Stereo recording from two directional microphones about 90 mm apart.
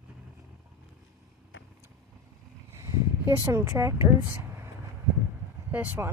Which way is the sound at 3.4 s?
30° right (ahead or behind).